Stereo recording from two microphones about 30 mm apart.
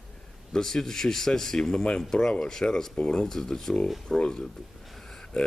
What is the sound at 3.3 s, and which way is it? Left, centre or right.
Speech, centre.